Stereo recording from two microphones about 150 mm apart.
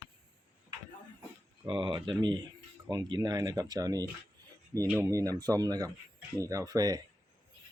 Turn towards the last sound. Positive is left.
turn(degrees=-25)  # may be behind; listen again after turning